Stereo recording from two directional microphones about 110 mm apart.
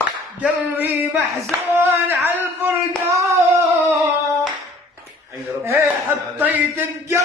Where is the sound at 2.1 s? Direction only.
20° right (ahead or behind).